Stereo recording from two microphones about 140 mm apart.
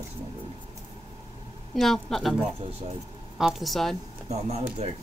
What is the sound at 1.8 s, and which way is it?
Speech, centre (ahead or behind).